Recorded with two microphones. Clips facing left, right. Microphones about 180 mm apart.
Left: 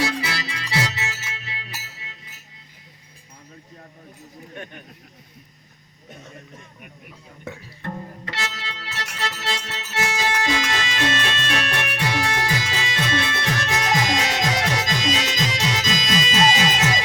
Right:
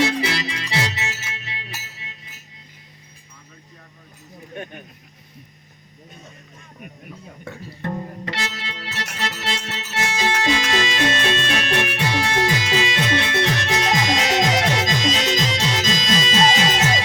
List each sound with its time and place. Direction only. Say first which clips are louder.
0.0 s music: right 4 dB; 20° right (ahead or behind)
8.3 s organ: even; 25° right (ahead or behind)